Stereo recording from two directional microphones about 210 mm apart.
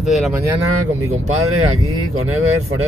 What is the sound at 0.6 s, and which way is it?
Speech, 85° right.